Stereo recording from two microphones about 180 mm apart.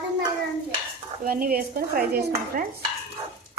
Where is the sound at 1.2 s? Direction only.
55° right (ahead or behind).